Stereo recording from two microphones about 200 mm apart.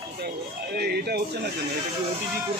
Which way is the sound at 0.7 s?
50° right (ahead or behind).